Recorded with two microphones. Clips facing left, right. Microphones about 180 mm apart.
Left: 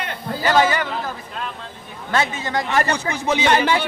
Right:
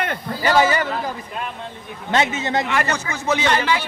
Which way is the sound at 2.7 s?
40° left (ahead or behind).